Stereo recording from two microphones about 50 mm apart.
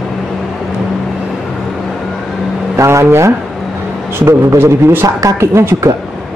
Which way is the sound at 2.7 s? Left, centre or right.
Right.